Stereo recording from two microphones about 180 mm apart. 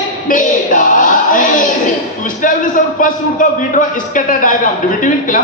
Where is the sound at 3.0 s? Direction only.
45° left (ahead or behind).